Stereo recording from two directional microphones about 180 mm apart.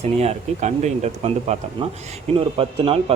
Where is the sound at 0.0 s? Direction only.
35° right (ahead or behind).